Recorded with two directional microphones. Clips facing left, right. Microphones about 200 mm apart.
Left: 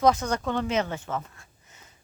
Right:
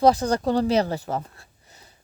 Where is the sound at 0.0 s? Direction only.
35° right (ahead or behind).